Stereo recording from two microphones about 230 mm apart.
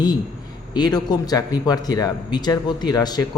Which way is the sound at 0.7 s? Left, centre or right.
Centre.